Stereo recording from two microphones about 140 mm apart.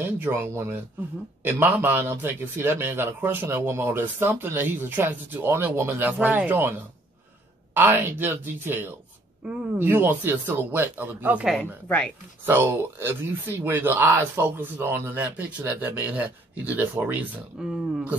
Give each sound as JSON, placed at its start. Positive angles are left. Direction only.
{"t": 0.0, "sound": "speech", "side_deg": -15}
{"t": 7.7, "sound": "speech", "side_deg": -15}
{"t": 11.5, "sound": "speech", "side_deg": 5}
{"t": 12.4, "sound": "speech", "side_deg": -15}